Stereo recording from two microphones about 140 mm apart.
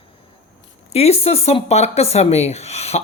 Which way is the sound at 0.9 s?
45° left (ahead or behind).